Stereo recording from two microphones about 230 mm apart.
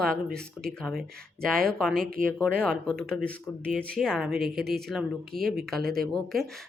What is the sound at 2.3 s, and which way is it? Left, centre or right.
Speech, centre.